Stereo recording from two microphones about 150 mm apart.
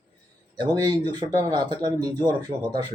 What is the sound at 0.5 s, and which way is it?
Speech, 30° right (ahead or behind).